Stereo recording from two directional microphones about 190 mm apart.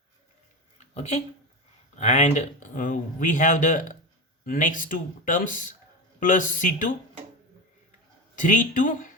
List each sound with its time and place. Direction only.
0.9 s speech: 35° left (ahead or behind)
8.4 s speech: 45° left (ahead or behind)